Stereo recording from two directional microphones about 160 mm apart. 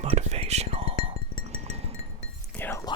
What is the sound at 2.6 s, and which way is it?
Whispering, 15° left (ahead or behind).